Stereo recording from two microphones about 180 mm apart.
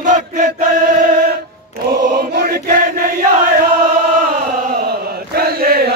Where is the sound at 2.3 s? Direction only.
55° right (ahead or behind).